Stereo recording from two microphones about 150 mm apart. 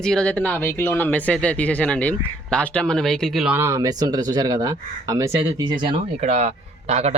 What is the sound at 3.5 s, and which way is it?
Speech, 20° right (ahead or behind).